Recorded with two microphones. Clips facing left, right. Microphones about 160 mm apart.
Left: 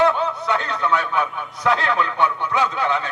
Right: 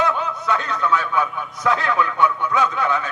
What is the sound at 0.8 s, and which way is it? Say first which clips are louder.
Speech: even; 20° left (ahead or behind).